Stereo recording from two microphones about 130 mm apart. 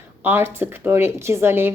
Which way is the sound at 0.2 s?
15° right (ahead or behind).